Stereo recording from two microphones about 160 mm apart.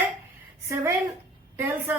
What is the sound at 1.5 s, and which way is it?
Speech, 10° right (ahead or behind).